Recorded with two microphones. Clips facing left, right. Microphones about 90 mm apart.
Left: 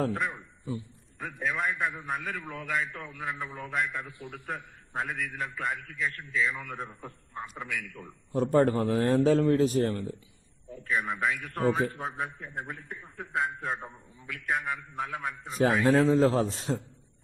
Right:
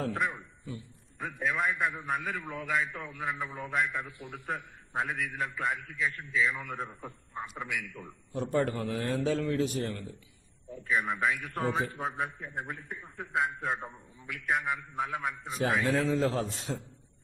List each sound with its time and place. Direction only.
0.1 s a man's voice: centre (ahead or behind)
4.2 s a man's voice: 25° right (ahead or behind)
4.4 s a man's voice: centre (ahead or behind)
8.5 s a man's voice: 40° left (ahead or behind)
10.7 s a man's voice: centre (ahead or behind)
15.8 s a man's voice: 40° left (ahead or behind)